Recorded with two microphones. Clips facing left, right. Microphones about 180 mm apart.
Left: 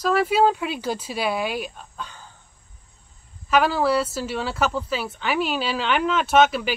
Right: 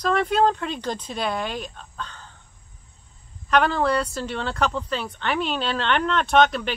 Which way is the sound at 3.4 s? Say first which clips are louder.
Left 1 dB; 5° left (ahead or behind).